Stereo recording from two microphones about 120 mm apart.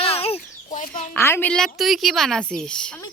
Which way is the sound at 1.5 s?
Centre (ahead or behind).